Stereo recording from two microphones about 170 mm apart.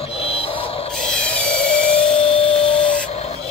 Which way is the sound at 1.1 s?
5° left (ahead or behind).